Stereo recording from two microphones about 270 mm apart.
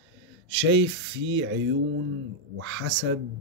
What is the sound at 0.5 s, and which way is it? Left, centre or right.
Speech, right.